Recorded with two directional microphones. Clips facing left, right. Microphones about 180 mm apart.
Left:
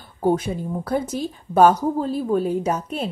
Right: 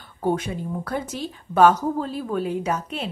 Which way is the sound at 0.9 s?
40° left (ahead or behind).